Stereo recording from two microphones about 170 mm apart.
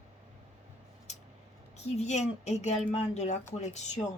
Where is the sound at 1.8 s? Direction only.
40° left (ahead or behind).